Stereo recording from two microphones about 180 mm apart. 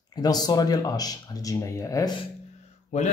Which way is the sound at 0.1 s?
20° left (ahead or behind).